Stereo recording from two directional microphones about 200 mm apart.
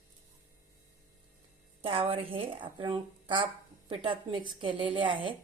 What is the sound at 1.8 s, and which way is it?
Speech, 25° right (ahead or behind).